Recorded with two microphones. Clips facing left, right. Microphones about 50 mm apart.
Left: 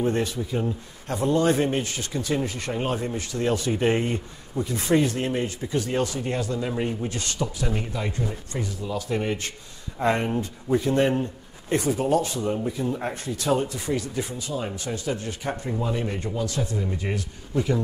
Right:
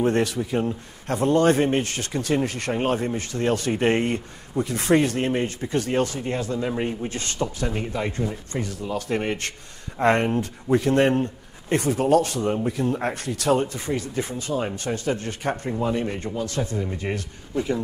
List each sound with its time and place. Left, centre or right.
0.0 s speech: right
2.7 s speech: right
6.6 s speech: centre
7.1 s speech: right
7.4 s speech: centre
8.6 s speech: right
13.6 s speech: right
15.8 s speech: right
16.3 s speech: right